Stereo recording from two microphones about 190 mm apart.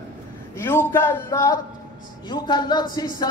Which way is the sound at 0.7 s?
15° left (ahead or behind).